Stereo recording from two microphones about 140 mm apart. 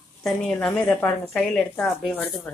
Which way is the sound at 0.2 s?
5° left (ahead or behind).